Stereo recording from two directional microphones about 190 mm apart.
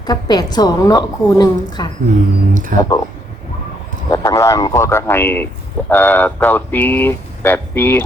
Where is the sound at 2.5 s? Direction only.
45° right (ahead or behind).